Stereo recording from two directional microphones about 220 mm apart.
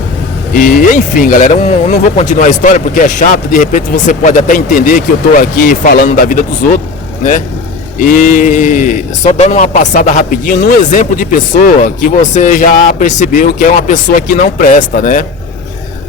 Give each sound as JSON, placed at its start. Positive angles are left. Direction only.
{"t": 0.5, "sound": "a man's voice", "side_deg": 35}
{"t": 7.9, "sound": "a man's voice", "side_deg": 40}